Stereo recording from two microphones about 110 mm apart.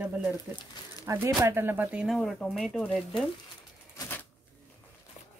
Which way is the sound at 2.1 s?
5° left (ahead or behind).